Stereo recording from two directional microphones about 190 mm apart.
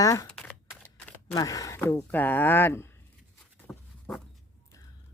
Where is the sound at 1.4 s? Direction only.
20° left (ahead or behind).